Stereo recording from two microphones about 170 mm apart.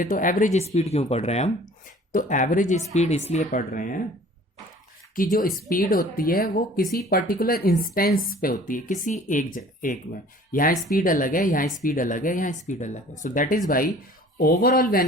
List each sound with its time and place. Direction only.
0.0 s speech: 50° left (ahead or behind)
2.1 s speech: 50° left (ahead or behind)
5.1 s speech: 55° left (ahead or behind)